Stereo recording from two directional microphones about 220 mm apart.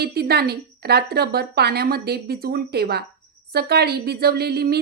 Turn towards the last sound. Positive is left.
turn(degrees=-45)  # may be behind; listen again after turning